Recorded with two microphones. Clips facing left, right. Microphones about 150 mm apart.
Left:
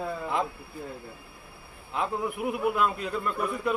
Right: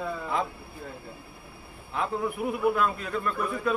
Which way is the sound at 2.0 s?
15° left (ahead or behind).